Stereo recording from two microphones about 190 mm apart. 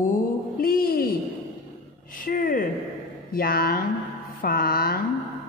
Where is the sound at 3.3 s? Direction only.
50° left (ahead or behind).